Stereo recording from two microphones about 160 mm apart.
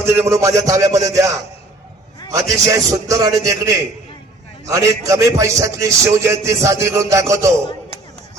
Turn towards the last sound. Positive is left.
turn(degrees=-20)  # may be behind; listen again after turning